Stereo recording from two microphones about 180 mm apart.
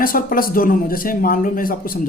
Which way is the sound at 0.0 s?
50° left (ahead or behind).